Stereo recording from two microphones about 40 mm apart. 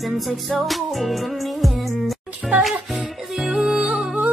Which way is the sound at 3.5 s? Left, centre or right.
Centre.